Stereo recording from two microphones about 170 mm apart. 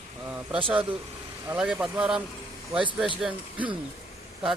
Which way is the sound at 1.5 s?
5° right (ahead or behind).